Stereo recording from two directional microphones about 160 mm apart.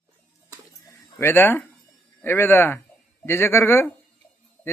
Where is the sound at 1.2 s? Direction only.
15° left (ahead or behind).